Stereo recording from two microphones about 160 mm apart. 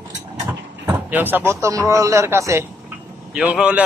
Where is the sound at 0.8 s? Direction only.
10° right (ahead or behind).